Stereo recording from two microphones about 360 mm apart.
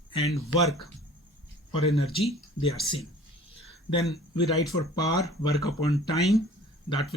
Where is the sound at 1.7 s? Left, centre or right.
Centre.